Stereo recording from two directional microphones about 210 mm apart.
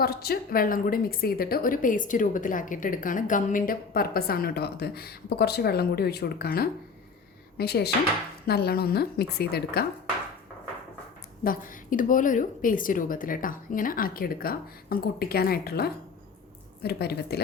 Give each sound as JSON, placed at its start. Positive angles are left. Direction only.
{"t": 0.0, "sound": "a woman's voice", "side_deg": 45}
{"t": 11.4, "sound": "a woman's voice", "side_deg": 40}